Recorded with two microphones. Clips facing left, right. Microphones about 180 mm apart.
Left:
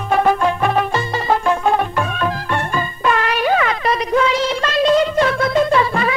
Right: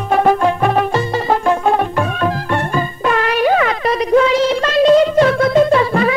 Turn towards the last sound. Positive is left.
turn(degrees=-40)  # may be behind; listen again after turning